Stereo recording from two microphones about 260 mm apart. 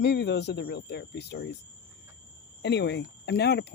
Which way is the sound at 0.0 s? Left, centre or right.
Left.